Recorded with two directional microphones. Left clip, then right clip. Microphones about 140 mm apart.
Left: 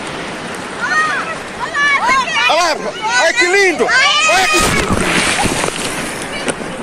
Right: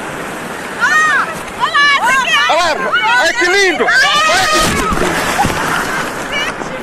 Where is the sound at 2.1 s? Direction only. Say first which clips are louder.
Right 1 dB; 30° left (ahead or behind).